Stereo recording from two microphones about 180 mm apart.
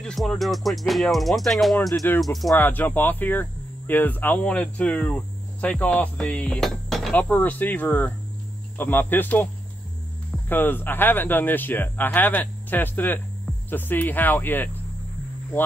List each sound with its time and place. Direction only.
0.0 s music: 5° left (ahead or behind)
1.9 s speech: 20° left (ahead or behind)
2.2 s music: centre (ahead or behind)
2.5 s hum: 10° left (ahead or behind)
10.5 s hum: 10° left (ahead or behind)